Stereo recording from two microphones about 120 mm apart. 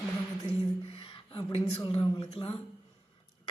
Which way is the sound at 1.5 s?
55° left (ahead or behind).